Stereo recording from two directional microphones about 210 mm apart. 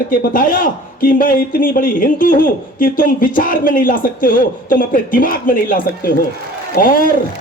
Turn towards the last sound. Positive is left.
turn(degrees=40)  # may be behind; listen again after turning